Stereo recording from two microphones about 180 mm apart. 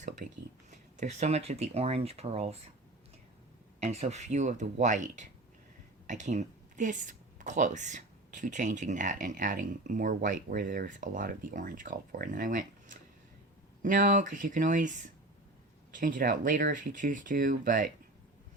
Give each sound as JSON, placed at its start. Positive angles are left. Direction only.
{"t": 0.0, "sound": "speech", "side_deg": -40}
{"t": 3.8, "sound": "speech", "side_deg": -40}